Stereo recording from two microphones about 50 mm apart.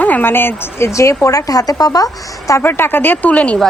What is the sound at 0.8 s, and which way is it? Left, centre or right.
Speech, left.